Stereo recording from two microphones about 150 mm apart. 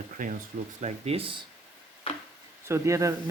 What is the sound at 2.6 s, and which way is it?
Speech, 20° right (ahead or behind).